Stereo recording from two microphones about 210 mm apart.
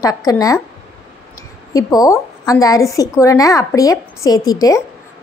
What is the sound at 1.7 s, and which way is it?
A woman's voice, 15° left (ahead or behind).